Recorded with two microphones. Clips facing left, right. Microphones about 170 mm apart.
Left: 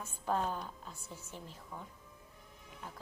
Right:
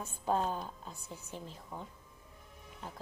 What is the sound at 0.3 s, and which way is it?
A woman's voice, 20° right (ahead or behind).